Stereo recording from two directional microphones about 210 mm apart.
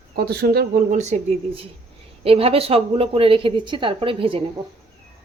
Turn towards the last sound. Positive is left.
turn(degrees=-25)  # may be behind; listen again after turning